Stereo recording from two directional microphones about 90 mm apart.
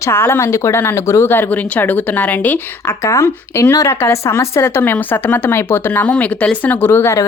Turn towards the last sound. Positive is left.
turn(degrees=30)  # may be behind; listen again after turning